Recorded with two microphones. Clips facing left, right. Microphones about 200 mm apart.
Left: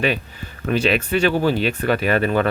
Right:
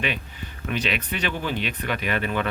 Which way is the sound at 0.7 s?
40° left (ahead or behind).